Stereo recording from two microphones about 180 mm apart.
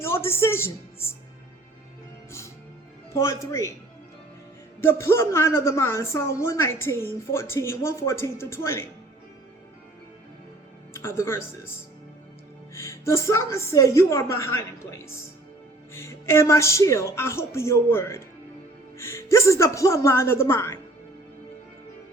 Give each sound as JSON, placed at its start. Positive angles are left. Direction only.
{"t": 0.0, "sound": "speech", "side_deg": 15}
{"t": 3.2, "sound": "a man's voice", "side_deg": 15}
{"t": 4.8, "sound": "a man's voice", "side_deg": 15}
{"t": 10.9, "sound": "a man's voice", "side_deg": 15}
{"t": 12.7, "sound": "a man's voice", "side_deg": 15}